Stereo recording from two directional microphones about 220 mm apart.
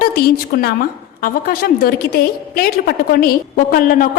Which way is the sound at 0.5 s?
45° left (ahead or behind).